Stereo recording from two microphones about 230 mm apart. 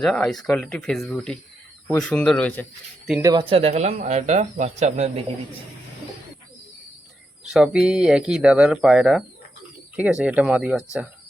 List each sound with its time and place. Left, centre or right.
0.0 s speech: centre
3.1 s speech: centre
3.5 s speech: right
7.4 s speech: centre